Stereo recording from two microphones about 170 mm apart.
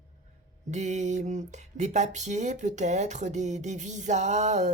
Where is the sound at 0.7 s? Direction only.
45° right (ahead or behind).